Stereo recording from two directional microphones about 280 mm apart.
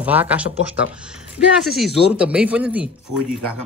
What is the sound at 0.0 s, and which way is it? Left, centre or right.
Speech, centre.